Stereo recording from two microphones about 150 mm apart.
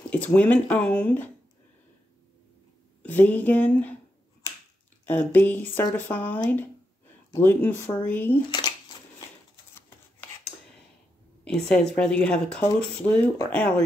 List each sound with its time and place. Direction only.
0.1 s speech: 10° left (ahead or behind)
3.0 s speech: 10° left (ahead or behind)
5.0 s speech: 10° left (ahead or behind)
8.5 s a sound: 30° left (ahead or behind)
11.4 s speech: 5° left (ahead or behind)